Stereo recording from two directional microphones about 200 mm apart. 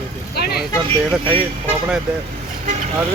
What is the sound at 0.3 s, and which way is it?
Vehicle, 50° left (ahead or behind).